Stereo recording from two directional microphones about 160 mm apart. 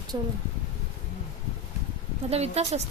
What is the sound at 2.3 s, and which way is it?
Speech, 40° right (ahead or behind).